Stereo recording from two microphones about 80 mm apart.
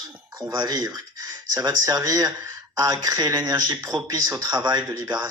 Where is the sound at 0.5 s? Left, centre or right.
Right.